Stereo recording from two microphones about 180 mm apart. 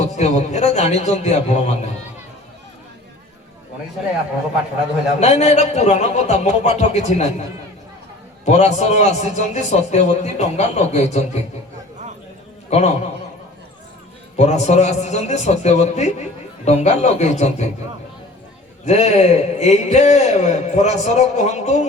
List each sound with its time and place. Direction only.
0.0 s a man's voice: 40° left (ahead or behind)
5.2 s a man's voice: 40° left (ahead or behind)
8.4 s a man's voice: 40° left (ahead or behind)
12.7 s a man's voice: 40° left (ahead or behind)
14.3 s a man's voice: 40° left (ahead or behind)
18.9 s a man's voice: 35° left (ahead or behind)